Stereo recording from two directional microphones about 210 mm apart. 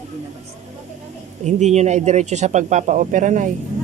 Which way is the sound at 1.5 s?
35° right (ahead or behind).